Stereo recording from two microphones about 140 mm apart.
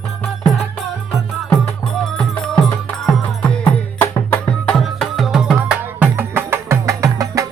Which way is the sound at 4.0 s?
15° left (ahead or behind).